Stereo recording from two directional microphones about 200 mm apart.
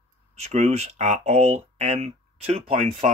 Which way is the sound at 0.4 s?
35° right (ahead or behind).